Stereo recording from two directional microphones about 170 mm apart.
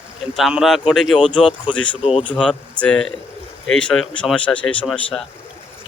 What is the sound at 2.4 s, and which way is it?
Speech, 5° left (ahead or behind).